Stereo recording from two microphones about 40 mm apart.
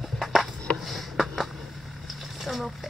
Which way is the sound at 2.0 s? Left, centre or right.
Centre.